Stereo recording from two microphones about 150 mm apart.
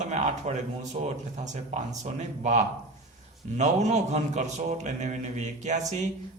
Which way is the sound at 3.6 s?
50° right (ahead or behind).